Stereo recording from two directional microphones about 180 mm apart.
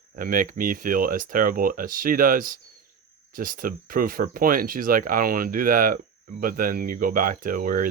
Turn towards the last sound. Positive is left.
turn(degrees=-50)  # may be behind; listen again after turning